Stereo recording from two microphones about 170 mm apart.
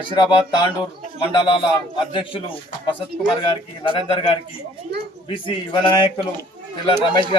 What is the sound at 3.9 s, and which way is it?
A man's voice, 30° left (ahead or behind).